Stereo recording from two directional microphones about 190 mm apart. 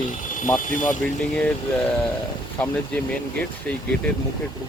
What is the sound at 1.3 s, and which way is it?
Speech, 5° left (ahead or behind).